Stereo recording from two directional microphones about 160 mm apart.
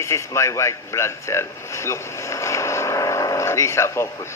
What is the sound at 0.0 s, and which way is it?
A man's voice, 20° left (ahead or behind).